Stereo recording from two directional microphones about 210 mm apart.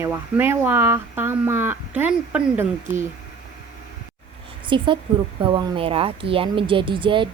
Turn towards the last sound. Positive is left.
turn(degrees=-25)  # may be behind; listen again after turning